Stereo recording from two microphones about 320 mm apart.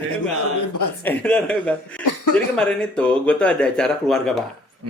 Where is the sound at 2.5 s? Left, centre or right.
Centre.